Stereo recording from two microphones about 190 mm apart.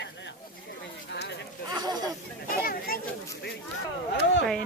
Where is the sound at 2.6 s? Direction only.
50° left (ahead or behind).